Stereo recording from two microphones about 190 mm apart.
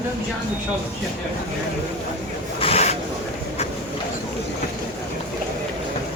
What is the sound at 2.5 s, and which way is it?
Rub, 30° left (ahead or behind).